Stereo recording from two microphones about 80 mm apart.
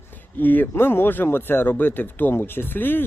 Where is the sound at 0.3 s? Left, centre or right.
Left.